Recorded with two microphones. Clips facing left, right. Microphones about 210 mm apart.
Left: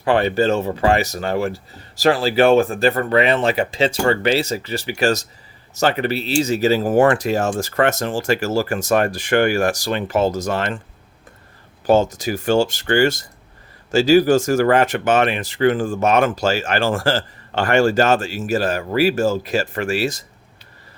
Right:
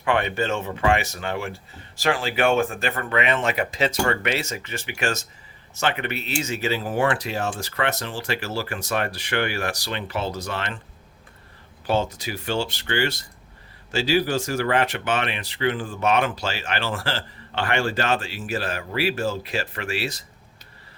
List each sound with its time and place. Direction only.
0.0 s speech: 35° left (ahead or behind)
11.9 s speech: 45° left (ahead or behind)